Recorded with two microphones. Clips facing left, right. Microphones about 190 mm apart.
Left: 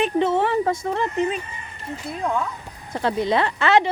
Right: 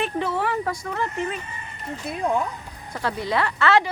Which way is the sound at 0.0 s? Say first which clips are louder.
Left 5 dB; 25° left (ahead or behind).